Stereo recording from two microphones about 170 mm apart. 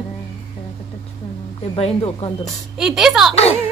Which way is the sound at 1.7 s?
30° left (ahead or behind).